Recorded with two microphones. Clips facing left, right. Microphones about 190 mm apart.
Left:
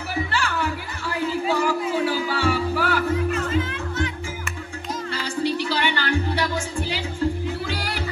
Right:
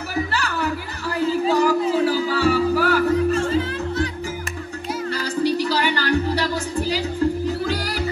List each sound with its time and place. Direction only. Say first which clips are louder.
0.1 s speech: right 1 dB; 40° right (ahead or behind)
1.4 s music: right 5 dB; 35° right (ahead or behind)
5.1 s music: right 3 dB; 40° right (ahead or behind)